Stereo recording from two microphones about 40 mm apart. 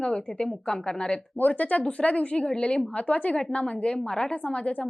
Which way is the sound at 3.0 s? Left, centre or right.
Left.